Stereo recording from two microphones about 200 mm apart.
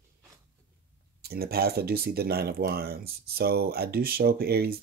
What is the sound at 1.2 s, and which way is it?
Speech, 50° right (ahead or behind).